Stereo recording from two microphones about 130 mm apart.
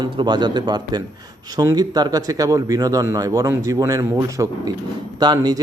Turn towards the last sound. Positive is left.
turn(degrees=-35)  # may be behind; listen again after turning